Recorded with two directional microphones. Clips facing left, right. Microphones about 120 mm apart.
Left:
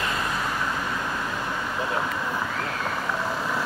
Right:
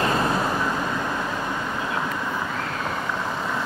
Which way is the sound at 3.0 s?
Centre (ahead or behind).